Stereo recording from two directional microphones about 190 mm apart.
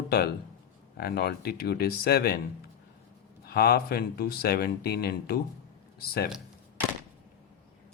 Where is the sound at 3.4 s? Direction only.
55° left (ahead or behind).